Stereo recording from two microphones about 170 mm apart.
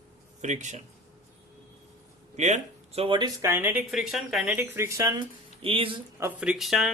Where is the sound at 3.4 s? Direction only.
15° right (ahead or behind).